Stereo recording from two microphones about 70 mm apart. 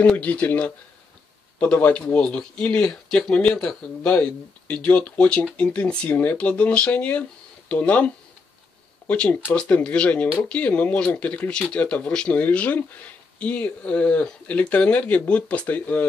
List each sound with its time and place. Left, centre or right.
0.0 s speech: left